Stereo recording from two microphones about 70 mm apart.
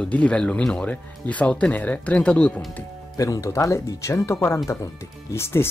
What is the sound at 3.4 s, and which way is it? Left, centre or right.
Speech, left.